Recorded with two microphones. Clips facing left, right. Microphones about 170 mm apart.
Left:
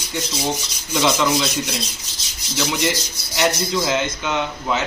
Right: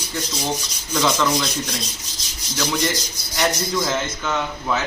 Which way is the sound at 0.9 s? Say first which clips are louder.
Left 1 dB; 10° left (ahead or behind).